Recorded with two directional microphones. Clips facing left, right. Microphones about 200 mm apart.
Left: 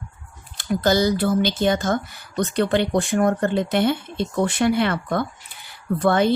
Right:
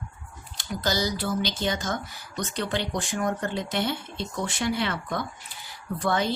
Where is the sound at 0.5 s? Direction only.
55° left (ahead or behind).